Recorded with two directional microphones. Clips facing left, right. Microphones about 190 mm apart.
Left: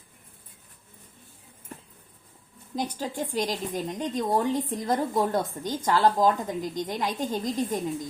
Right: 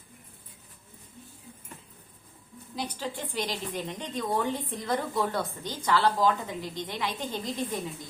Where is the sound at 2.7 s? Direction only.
45° left (ahead or behind).